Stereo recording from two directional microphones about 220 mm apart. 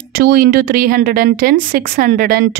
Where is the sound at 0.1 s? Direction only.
45° right (ahead or behind).